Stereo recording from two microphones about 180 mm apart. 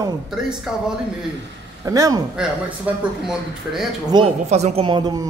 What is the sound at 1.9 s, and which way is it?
Speech, 20° right (ahead or behind).